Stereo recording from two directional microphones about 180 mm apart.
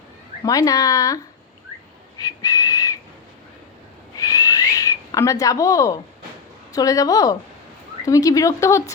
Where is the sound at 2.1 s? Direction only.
20° left (ahead or behind).